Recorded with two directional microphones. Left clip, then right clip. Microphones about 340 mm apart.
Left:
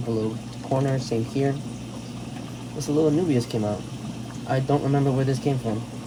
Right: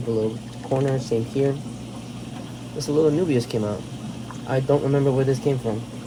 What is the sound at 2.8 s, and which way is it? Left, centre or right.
A man's voice, centre.